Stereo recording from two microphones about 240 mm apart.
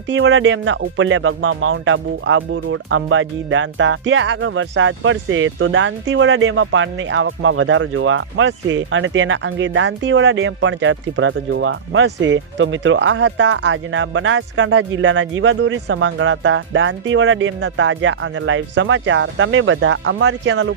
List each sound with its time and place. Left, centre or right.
0.1 s speech: right